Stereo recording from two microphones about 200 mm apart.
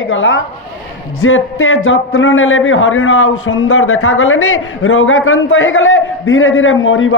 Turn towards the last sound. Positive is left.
turn(degrees=80)